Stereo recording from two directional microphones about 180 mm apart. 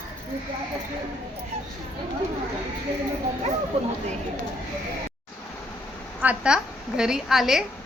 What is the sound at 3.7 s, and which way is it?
Speech, 35° right (ahead or behind).